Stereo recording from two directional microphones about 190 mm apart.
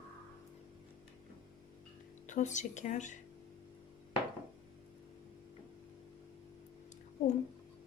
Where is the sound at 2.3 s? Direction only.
40° left (ahead or behind).